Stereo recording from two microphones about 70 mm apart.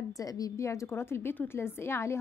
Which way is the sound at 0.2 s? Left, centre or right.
Left.